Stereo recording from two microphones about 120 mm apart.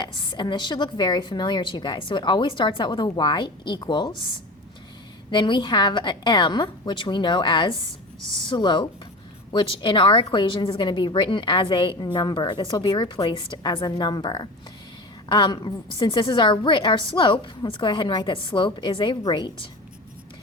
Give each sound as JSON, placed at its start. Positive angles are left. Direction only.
{"t": 0.0, "sound": "a woman's voice", "side_deg": 40}
{"t": 5.3, "sound": "a woman's voice", "side_deg": 40}